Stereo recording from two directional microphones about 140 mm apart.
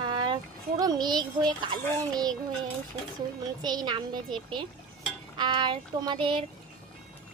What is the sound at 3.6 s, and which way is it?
A woman's voice, 30° right (ahead or behind).